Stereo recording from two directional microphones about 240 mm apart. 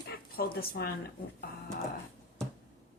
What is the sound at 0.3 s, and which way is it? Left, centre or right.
Speech, left.